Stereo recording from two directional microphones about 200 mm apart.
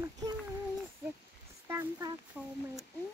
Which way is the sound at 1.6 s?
15° right (ahead or behind).